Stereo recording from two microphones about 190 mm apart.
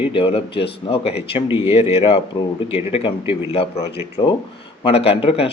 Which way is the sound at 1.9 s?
30° left (ahead or behind).